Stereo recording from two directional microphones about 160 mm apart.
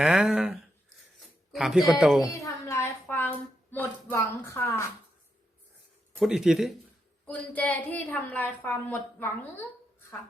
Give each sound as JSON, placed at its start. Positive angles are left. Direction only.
{"t": 0.0, "sound": "speech", "side_deg": -5}
{"t": 2.3, "sound": "a sound", "side_deg": 20}
{"t": 6.1, "sound": "speech", "side_deg": -5}
{"t": 7.5, "sound": "a woman's voice", "side_deg": 10}